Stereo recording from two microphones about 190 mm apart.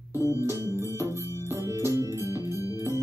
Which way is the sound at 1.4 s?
15° right (ahead or behind).